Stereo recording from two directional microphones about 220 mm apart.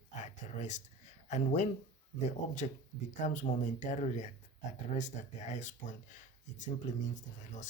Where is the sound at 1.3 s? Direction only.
30° left (ahead or behind).